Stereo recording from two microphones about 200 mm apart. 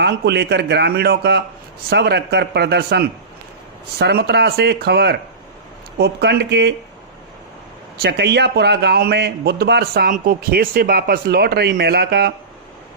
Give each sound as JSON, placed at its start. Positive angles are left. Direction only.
{"t": 0.0, "sound": "speech", "side_deg": -55}
{"t": 8.0, "sound": "a man's voice", "side_deg": -55}